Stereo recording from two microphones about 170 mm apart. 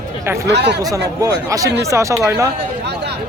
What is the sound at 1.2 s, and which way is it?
Speech, 20° right (ahead or behind).